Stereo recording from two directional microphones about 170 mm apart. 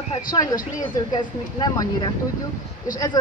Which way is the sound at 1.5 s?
25° left (ahead or behind).